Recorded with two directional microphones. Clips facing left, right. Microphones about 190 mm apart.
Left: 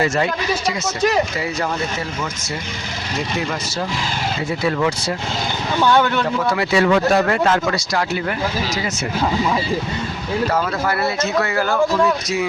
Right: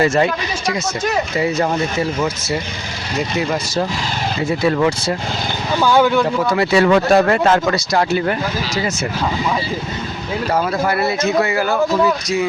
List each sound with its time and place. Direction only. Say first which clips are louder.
4.8 s speech: right 3 dB; 30° right (ahead or behind)
5.8 s speech: right 3 dB; 5° right (ahead or behind)
6.6 s speech: right 3 dB; 40° right (ahead or behind)
10.8 s speech: right 3 dB; 15° right (ahead or behind)